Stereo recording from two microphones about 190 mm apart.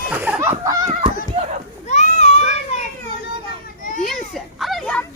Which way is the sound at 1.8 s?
35° left (ahead or behind).